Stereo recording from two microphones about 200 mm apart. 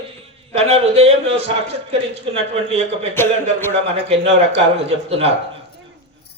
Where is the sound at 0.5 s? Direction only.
30° right (ahead or behind).